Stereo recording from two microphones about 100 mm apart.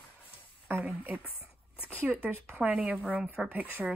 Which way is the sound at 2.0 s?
25° right (ahead or behind).